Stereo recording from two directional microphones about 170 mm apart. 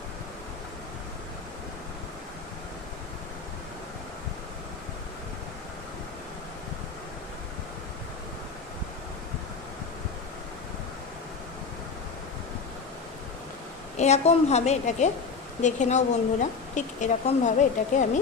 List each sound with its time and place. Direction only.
13.9 s a woman's voice: 40° left (ahead or behind)